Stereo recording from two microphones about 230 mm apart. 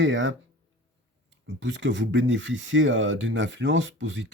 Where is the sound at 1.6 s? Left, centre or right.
Right.